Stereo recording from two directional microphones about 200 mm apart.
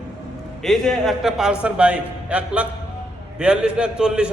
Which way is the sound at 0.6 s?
Centre (ahead or behind).